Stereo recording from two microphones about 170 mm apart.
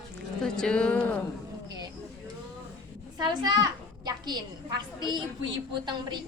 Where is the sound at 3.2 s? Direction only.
25° right (ahead or behind).